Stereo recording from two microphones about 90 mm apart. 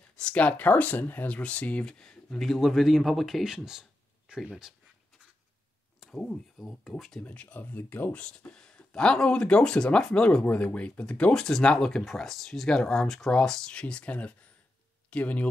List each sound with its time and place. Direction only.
0.2 s speech: 15° left (ahead or behind); by 4.7 s 5° right (ahead or behind)
5.9 s speech: 5° left (ahead or behind)